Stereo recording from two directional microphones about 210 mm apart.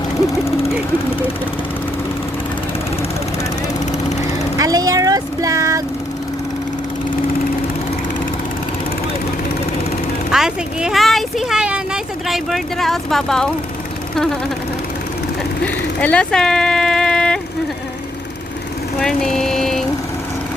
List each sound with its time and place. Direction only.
4.5 s speech: 15° right (ahead or behind)
10.3 s speech: 5° right (ahead or behind)
15.6 s speech: 5° left (ahead or behind)
18.9 s speech: 5° left (ahead or behind)